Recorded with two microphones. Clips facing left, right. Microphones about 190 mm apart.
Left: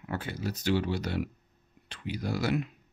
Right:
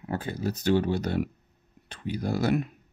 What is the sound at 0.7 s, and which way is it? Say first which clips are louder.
Speech: right 4 dB; 50° right (ahead or behind).